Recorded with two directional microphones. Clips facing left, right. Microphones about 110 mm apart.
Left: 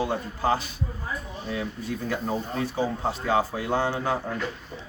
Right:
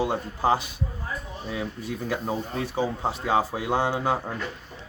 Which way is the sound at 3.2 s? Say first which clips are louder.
Right 1 dB; 15° right (ahead or behind).